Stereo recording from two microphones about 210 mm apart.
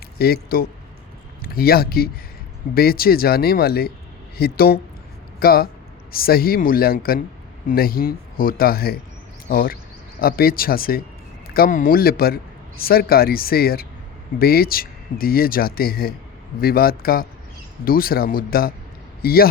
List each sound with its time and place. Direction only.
0.2 s a man's voice: 45° left (ahead or behind)